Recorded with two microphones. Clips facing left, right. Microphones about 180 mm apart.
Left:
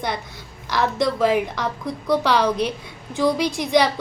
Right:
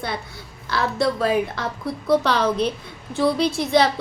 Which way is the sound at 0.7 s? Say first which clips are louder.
Left 1 dB; 20° left (ahead or behind).